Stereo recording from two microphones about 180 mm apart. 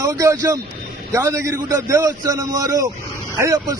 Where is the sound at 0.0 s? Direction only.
15° right (ahead or behind).